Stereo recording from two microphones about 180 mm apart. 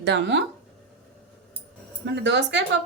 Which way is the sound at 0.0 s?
75° right (ahead or behind).